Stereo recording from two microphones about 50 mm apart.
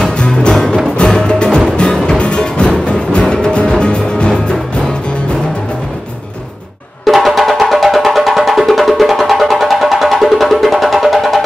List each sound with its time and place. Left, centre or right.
0.2 s music: centre
7.1 s music: centre